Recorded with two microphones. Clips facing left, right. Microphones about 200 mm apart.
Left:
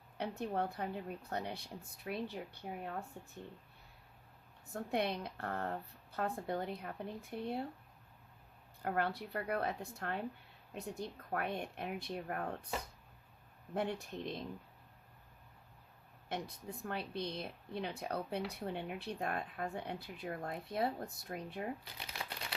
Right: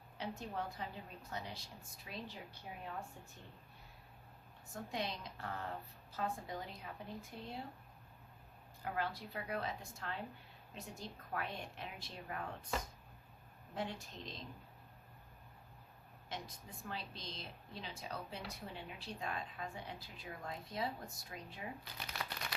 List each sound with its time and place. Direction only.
0.2 s speech: 60° left (ahead or behind)
4.7 s speech: 60° left (ahead or behind)
8.8 s speech: 55° left (ahead or behind)
13.7 s speech: 60° left (ahead or behind)
16.3 s speech: 60° left (ahead or behind)
21.9 s crumpling: 25° left (ahead or behind)